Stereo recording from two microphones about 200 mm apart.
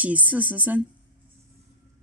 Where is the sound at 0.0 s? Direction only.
5° right (ahead or behind).